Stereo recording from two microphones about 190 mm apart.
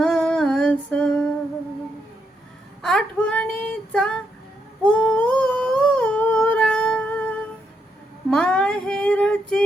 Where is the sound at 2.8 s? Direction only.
Centre (ahead or behind).